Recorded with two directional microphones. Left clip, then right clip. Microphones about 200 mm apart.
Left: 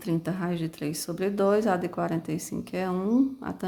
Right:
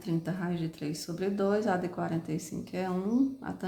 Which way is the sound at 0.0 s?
35° left (ahead or behind).